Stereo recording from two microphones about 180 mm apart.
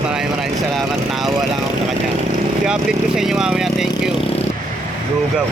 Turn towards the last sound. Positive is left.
turn(degrees=-5)  # may be behind; listen again after turning